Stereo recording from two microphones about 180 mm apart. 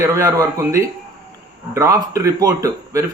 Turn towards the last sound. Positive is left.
turn(degrees=-20)  # may be behind; listen again after turning